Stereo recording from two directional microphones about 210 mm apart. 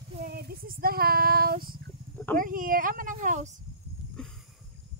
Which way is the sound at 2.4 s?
40° right (ahead or behind).